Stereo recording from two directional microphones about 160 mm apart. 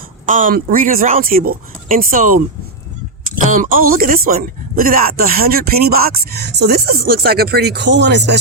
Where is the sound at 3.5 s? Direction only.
55° right (ahead or behind).